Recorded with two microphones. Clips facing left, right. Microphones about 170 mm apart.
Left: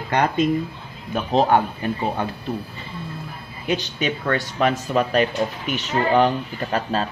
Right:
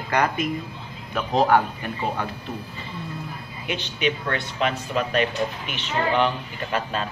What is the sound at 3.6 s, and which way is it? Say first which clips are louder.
Speech: left 2 dB; 40° left (ahead or behind).